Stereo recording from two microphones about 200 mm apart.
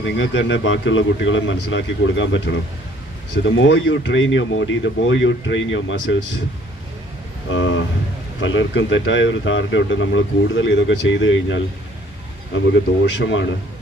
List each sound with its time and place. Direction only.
0.2 s speech: 70° left (ahead or behind)
7.5 s speech: 70° left (ahead or behind)